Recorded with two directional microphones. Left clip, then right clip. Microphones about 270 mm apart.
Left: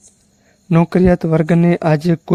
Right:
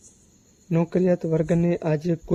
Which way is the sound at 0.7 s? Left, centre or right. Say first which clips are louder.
Left 8 dB; left.